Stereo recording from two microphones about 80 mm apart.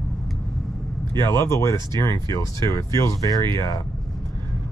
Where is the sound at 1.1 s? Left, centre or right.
Left.